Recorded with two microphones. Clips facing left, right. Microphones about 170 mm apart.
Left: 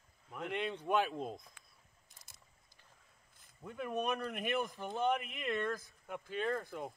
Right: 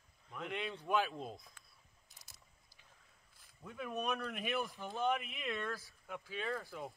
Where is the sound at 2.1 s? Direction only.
Centre (ahead or behind).